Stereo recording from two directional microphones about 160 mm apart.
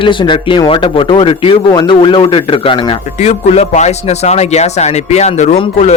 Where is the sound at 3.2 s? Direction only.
45° left (ahead or behind).